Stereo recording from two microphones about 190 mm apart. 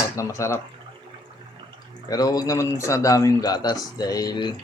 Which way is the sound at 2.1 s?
20° left (ahead or behind).